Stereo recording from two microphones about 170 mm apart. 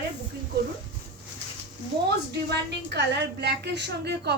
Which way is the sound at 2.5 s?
85° right.